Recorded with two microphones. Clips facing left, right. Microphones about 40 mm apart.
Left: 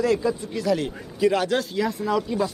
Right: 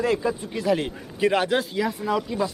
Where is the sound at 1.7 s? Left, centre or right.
Centre.